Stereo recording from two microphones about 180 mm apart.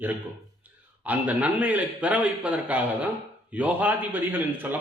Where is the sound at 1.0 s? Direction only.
10° right (ahead or behind).